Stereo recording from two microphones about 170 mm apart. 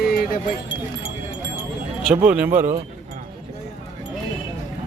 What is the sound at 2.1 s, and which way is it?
Speech, 5° right (ahead or behind).